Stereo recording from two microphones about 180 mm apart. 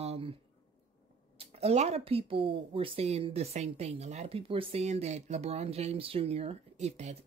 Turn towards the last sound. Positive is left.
turn(degrees=-40)  # may be behind; listen again after turning